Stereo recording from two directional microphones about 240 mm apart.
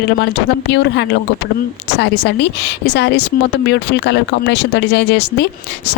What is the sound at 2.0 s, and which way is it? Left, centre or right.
Speech, left.